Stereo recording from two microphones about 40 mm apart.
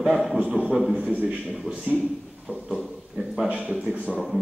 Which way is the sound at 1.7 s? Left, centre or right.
Right.